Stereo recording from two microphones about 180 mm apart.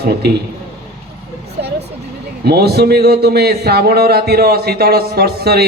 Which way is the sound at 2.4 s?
60° right (ahead or behind).